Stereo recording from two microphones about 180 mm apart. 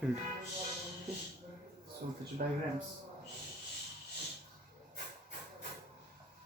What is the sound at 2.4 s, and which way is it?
Speech, 55° right (ahead or behind).